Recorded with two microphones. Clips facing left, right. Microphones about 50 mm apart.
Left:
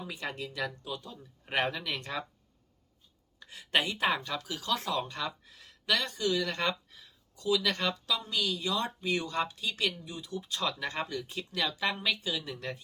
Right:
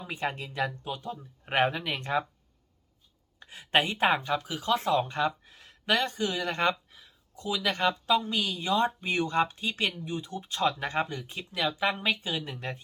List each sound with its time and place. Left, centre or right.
0.1 s speech: right
3.4 s speech: right
12.0 s speech: right